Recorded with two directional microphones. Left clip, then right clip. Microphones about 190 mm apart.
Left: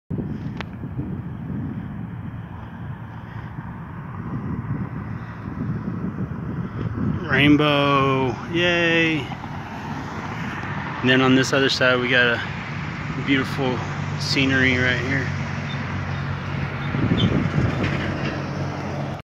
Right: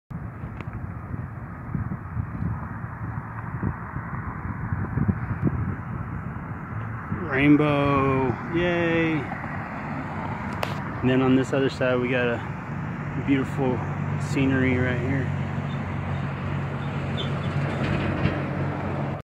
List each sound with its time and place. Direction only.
7.2 s speech: centre (ahead or behind)
11.1 s speech: 10° left (ahead or behind)
16.8 s vehicle: 30° left (ahead or behind)
17.6 s vehicle: 50° left (ahead or behind)